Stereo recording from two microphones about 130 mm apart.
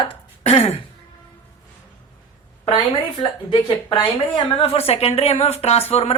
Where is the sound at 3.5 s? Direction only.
35° left (ahead or behind).